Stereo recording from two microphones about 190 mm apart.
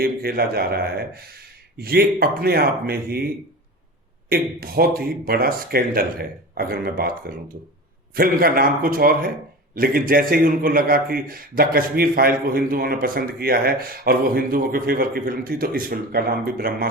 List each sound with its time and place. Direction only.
0.0 s a man's voice: 55° right (ahead or behind)
4.3 s a man's voice: 50° right (ahead or behind)